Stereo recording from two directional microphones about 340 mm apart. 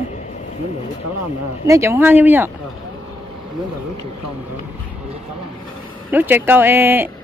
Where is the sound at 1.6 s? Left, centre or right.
Centre.